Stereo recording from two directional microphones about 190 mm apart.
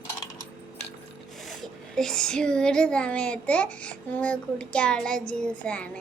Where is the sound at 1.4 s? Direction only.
Centre (ahead or behind).